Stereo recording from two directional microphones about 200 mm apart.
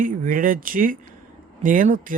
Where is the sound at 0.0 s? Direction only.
40° right (ahead or behind).